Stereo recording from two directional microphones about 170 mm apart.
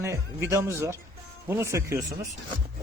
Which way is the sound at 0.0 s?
15° right (ahead or behind).